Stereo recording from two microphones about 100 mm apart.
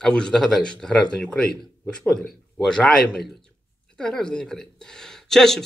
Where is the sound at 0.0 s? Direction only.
5° left (ahead or behind).